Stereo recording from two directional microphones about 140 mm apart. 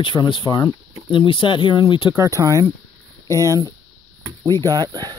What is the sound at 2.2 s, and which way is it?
Speech, 25° right (ahead or behind).